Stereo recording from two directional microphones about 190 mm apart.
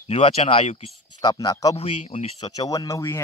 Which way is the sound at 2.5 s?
20° left (ahead or behind).